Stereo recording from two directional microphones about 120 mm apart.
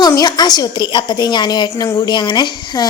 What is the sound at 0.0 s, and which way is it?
A woman's voice, 35° left (ahead or behind).